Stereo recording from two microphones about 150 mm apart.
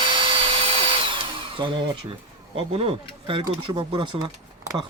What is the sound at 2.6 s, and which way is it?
Speech, 40° right (ahead or behind).